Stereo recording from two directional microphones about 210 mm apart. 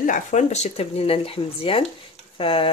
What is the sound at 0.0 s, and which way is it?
Speech, 35° left (ahead or behind).